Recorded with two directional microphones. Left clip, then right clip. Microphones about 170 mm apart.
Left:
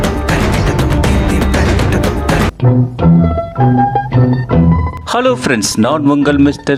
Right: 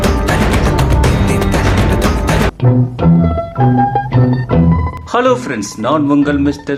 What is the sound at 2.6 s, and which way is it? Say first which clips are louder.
Music: left 1 dB; centre (ahead or behind).